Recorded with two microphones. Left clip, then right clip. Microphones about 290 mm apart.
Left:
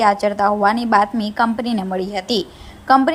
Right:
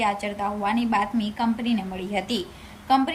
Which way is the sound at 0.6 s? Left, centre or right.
Centre.